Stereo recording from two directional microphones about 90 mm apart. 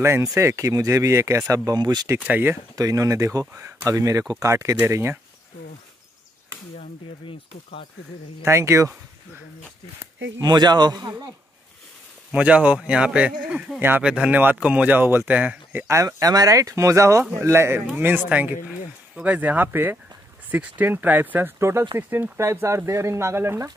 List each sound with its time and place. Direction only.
0.0 s speech: 35° right (ahead or behind)
1.7 s a man's voice: 50° right (ahead or behind)
2.1 s speech: 20° right (ahead or behind)
2.7 s speech: 40° right (ahead or behind)
3.5 s speech: 25° right (ahead or behind)
8.5 s speech: 30° right (ahead or behind)
10.4 s a man's voice: 50° right (ahead or behind)
12.3 s a man's voice: 15° right (ahead or behind)
14.0 s a man's voice: 10° right (ahead or behind)
15.9 s speech: 35° right (ahead or behind)